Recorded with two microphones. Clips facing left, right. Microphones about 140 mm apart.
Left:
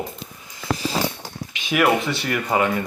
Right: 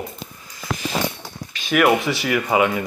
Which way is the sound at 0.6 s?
30° left (ahead or behind).